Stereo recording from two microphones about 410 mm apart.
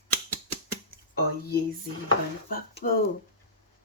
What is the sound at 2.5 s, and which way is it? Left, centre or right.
Speech, left.